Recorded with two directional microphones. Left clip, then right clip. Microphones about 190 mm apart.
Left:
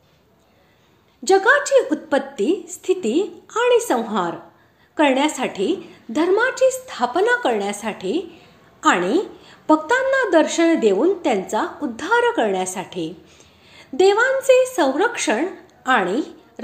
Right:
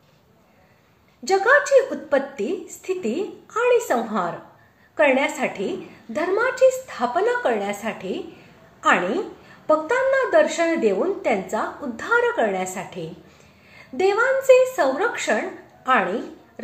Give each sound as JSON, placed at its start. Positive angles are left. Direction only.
{"t": 1.2, "sound": "a woman's voice", "side_deg": 30}